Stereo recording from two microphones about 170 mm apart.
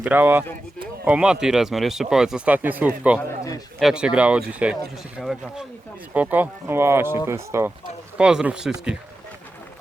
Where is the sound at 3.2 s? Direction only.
20° left (ahead or behind).